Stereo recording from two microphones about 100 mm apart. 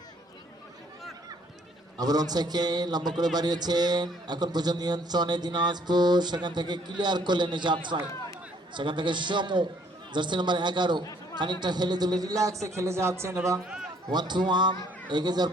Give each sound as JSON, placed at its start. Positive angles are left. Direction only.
{"t": 2.0, "sound": "a man's voice", "side_deg": -40}
{"t": 14.1, "sound": "a man's voice", "side_deg": -45}